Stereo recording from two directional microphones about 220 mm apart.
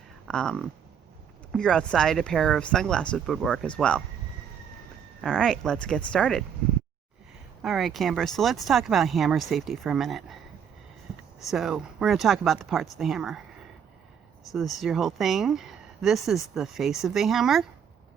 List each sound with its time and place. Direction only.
0.3 s speech: 5° left (ahead or behind)
5.2 s speech: 5° left (ahead or behind)
7.6 s speech: centre (ahead or behind)
11.3 s speech: centre (ahead or behind)
14.5 s speech: centre (ahead or behind)